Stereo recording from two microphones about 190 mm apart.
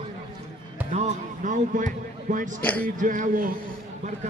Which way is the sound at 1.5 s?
40° right (ahead or behind).